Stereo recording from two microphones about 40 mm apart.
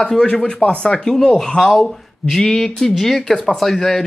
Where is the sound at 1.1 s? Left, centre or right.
Centre.